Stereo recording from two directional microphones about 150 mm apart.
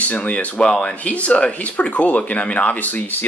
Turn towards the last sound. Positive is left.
turn(degrees=10)  # may be behind; listen again after turning